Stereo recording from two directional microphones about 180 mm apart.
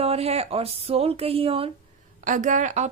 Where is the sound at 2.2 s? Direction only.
45° right (ahead or behind).